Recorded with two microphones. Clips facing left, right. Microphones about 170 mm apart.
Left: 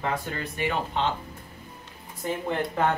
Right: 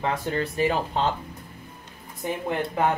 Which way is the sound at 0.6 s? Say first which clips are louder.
Right 2 dB; 35° right (ahead or behind).